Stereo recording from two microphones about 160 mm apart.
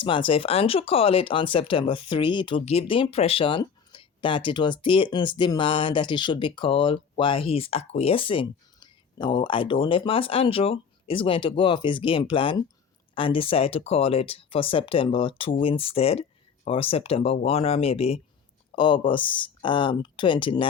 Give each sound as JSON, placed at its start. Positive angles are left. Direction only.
{"t": 0.0, "sound": "speech", "side_deg": 30}